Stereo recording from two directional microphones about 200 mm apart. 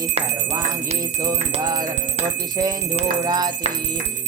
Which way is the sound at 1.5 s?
20° right (ahead or behind).